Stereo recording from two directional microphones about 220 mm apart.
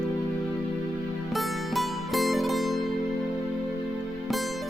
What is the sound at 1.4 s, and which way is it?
Music, centre (ahead or behind).